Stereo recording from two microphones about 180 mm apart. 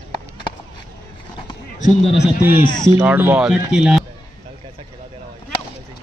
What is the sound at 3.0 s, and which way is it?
Speech, 10° right (ahead or behind).